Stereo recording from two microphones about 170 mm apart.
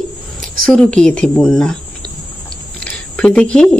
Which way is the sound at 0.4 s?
5° left (ahead or behind).